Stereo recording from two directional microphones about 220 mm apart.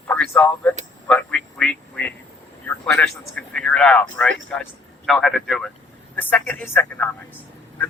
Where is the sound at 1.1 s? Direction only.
5° left (ahead or behind).